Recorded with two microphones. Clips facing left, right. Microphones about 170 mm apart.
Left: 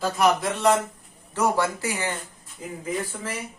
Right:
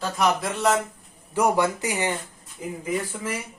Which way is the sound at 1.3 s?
15° right (ahead or behind).